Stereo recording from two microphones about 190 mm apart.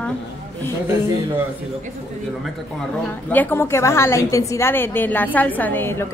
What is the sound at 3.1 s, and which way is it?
A woman's voice, 10° left (ahead or behind).